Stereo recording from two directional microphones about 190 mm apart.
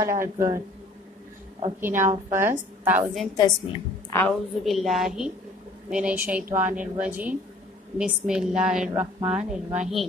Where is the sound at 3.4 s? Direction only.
20° left (ahead or behind).